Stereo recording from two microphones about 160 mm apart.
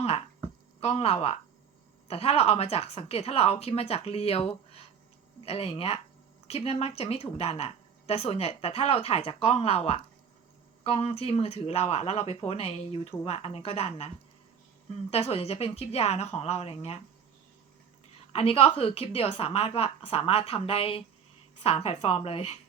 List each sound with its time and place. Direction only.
0.0 s a sound: 40° left (ahead or behind)
0.8 s a woman's voice: 40° left (ahead or behind)
15.1 s a woman's voice: 40° left (ahead or behind)
18.3 s a woman's voice: 40° left (ahead or behind)